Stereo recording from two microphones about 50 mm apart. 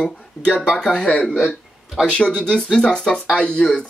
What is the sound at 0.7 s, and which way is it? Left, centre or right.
Speech, centre.